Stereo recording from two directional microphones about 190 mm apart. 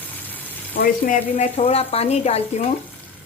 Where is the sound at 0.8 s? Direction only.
45° left (ahead or behind).